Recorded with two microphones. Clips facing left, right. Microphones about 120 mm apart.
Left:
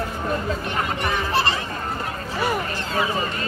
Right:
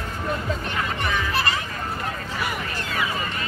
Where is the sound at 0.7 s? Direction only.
35° left (ahead or behind).